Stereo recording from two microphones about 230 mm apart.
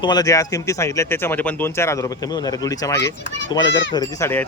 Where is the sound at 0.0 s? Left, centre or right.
Centre.